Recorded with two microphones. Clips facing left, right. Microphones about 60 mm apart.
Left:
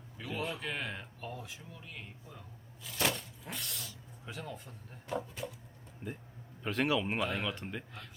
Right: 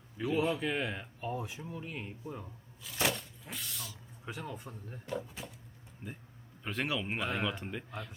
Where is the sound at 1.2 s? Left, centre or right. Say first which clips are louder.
Right 8 dB; centre.